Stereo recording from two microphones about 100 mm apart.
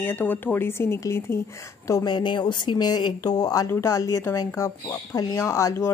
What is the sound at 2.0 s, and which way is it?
A woman's voice, 50° left (ahead or behind).